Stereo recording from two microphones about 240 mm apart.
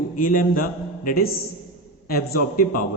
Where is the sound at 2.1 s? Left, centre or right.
Left.